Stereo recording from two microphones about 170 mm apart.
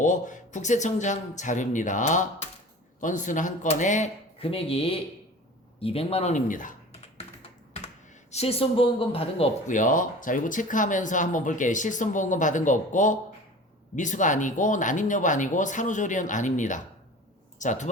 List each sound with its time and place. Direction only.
0.0 s speech: 50° left (ahead or behind)
8.3 s speech: 35° left (ahead or behind)
9.7 s speech: 50° left (ahead or behind)